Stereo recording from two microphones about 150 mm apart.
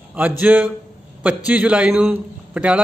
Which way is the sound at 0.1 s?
10° right (ahead or behind).